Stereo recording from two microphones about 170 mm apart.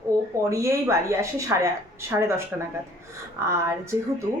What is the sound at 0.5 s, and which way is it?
Speech, 15° right (ahead or behind).